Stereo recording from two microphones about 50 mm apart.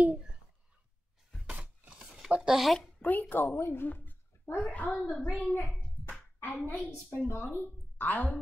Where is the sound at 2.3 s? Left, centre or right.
Centre.